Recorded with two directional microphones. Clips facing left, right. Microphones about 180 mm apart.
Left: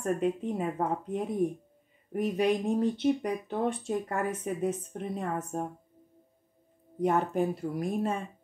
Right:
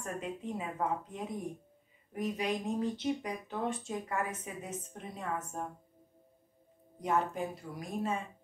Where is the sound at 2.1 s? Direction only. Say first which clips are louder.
Left 7 dB; 60° left (ahead or behind).